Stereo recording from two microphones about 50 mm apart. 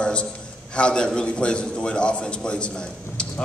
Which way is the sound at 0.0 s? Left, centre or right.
Left.